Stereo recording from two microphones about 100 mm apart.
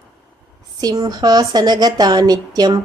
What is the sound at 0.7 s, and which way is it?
Speech, 40° right (ahead or behind).